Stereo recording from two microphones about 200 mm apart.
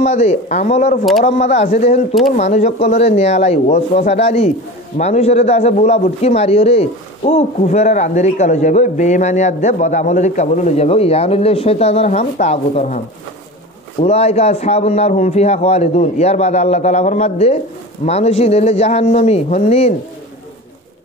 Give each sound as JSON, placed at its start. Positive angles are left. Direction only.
{"t": 0.0, "sound": "a man's voice", "side_deg": 35}
{"t": 14.0, "sound": "a man's voice", "side_deg": 30}